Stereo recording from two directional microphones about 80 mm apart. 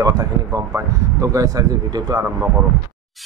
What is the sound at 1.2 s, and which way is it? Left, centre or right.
Speech, right.